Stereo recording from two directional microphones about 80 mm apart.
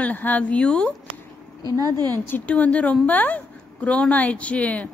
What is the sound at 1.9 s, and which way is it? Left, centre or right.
Speech, right.